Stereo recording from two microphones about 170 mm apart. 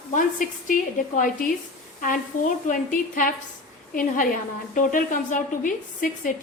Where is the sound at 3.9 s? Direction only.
50° left (ahead or behind).